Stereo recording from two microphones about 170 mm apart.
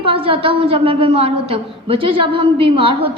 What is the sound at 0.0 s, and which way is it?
A woman's voice, 30° right (ahead or behind).